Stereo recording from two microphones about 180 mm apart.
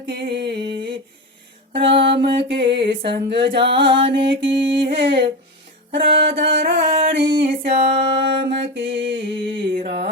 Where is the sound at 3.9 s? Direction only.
30° right (ahead or behind).